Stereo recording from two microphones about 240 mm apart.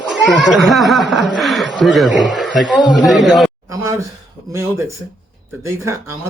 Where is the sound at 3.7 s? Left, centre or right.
Centre.